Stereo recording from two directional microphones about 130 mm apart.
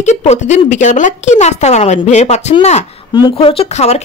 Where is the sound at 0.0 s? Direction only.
65° left (ahead or behind).